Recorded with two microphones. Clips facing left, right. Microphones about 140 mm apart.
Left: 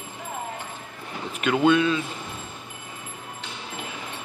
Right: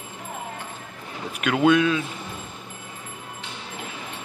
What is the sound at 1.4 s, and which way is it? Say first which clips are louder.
Speech: right 1 dB; 5° right (ahead or behind).